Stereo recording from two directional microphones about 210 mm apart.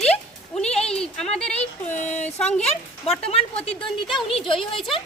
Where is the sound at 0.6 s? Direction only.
30° left (ahead or behind).